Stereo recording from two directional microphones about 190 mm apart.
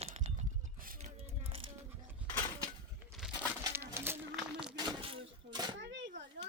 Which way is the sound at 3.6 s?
15° right (ahead or behind).